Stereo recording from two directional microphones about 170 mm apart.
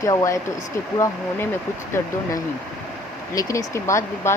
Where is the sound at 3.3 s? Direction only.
20° left (ahead or behind).